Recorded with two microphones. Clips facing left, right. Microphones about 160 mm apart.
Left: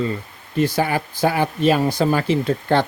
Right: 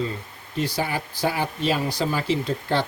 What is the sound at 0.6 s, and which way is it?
Speech, 50° left (ahead or behind).